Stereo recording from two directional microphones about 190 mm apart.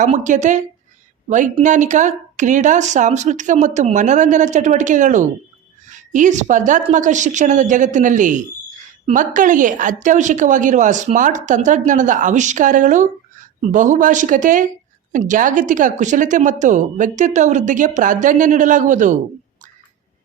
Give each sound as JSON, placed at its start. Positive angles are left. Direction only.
{"t": 0.0, "sound": "a woman's voice", "side_deg": -40}